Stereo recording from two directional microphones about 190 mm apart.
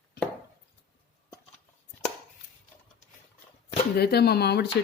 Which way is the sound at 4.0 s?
55° left (ahead or behind).